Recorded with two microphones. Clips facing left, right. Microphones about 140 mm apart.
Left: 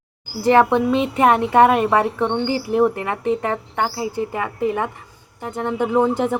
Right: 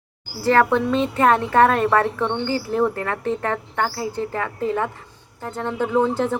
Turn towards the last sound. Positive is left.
turn(degrees=15)  # may be behind; listen again after turning